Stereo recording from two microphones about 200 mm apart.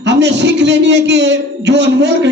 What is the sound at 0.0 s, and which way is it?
A man's voice, 60° right (ahead or behind).